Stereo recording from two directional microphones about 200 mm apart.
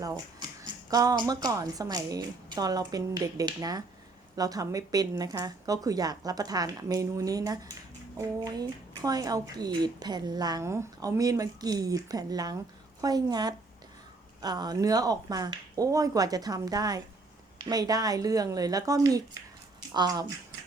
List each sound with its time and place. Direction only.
0.0 s a woman's voice: 20° right (ahead or behind)